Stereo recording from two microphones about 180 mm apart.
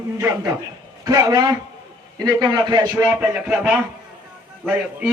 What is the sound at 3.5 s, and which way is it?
Speech, 5° right (ahead or behind).